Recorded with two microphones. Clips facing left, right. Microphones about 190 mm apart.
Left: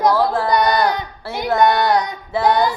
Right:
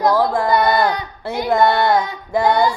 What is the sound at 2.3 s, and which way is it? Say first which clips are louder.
Child singing: right 1 dB; 10° right (ahead or behind).